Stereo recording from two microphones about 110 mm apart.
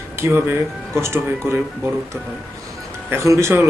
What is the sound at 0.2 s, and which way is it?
A man's voice, 20° right (ahead or behind).